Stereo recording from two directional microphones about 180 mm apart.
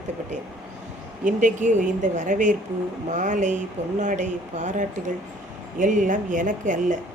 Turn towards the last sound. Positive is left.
turn(degrees=-45)  # may be behind; listen again after turning